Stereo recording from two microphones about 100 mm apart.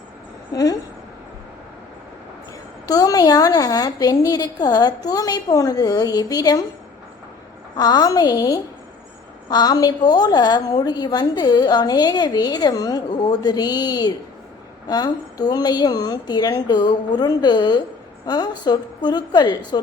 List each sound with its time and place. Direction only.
0.5 s a woman's voice: 35° left (ahead or behind)
2.8 s a woman's voice: 40° left (ahead or behind)
7.8 s a woman's voice: 40° left (ahead or behind)